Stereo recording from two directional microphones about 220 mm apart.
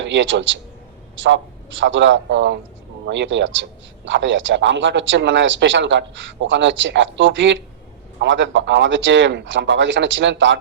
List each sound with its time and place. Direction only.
0.0 s a man's voice: 55° right (ahead or behind)